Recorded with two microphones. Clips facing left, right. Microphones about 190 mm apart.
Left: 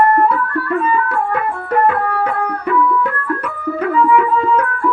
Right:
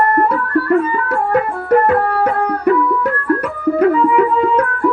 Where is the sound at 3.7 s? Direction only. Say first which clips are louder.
Right 2 dB; 40° right (ahead or behind).